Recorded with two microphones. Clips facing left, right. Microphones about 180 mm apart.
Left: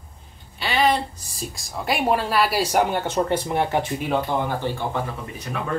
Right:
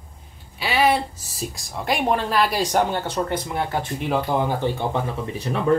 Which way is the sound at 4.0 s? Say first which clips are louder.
Right 1 dB; centre (ahead or behind).